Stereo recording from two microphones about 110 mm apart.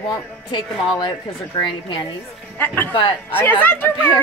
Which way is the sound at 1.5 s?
50° left (ahead or behind).